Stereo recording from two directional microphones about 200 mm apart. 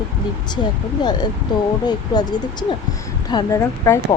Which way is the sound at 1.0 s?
20° left (ahead or behind).